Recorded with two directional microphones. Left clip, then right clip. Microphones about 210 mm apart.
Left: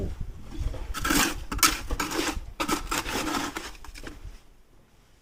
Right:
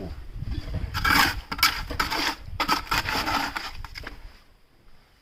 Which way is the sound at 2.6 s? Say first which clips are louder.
Right 5 dB; 25° right (ahead or behind).